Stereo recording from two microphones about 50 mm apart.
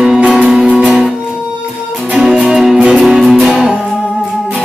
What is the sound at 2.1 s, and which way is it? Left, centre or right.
Music, centre.